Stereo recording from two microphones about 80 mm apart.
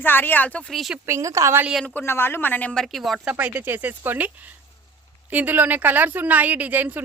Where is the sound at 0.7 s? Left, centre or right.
Centre.